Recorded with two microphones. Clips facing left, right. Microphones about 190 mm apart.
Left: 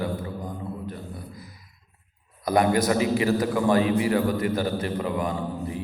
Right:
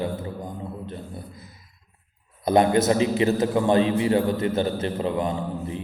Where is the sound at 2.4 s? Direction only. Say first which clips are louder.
Right 3 dB; 25° right (ahead or behind).